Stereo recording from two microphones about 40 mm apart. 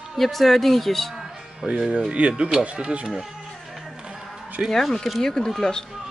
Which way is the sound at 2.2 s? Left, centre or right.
Right.